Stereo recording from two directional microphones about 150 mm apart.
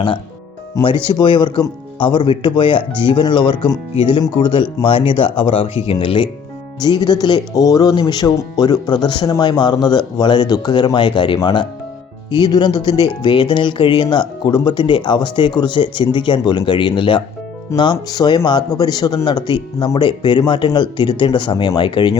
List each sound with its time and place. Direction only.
0.8 s speech: 30° left (ahead or behind)